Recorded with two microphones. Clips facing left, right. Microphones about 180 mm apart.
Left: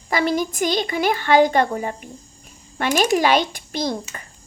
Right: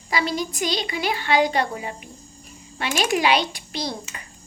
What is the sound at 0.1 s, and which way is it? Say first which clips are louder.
Speech: left 4 dB; 50° left (ahead or behind).